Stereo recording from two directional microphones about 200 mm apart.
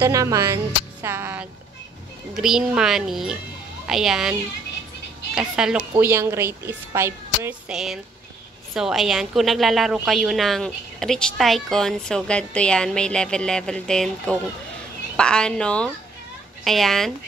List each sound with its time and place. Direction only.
0.0 s a woman's voice: 15° right (ahead or behind); by 17.1 s centre (ahead or behind)